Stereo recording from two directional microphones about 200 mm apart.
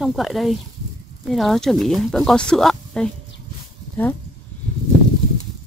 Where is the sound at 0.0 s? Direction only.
Centre (ahead or behind).